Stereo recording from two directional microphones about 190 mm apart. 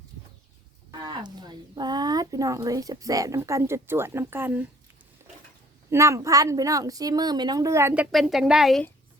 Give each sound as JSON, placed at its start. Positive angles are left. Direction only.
{"t": 1.0, "sound": "speech", "side_deg": -20}
{"t": 5.9, "sound": "a woman's voice", "side_deg": -15}
{"t": 8.1, "sound": "speech", "side_deg": 0}